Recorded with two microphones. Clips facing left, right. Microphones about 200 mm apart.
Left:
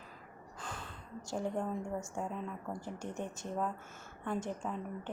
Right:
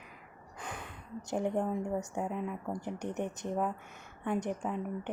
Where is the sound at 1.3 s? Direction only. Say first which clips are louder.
Right 4 dB; 20° right (ahead or behind).